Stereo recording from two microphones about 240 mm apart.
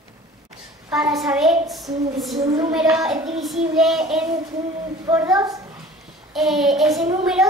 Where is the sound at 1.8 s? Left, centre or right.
Centre.